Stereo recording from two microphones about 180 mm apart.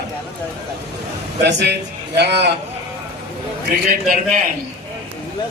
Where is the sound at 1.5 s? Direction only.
75° right (ahead or behind).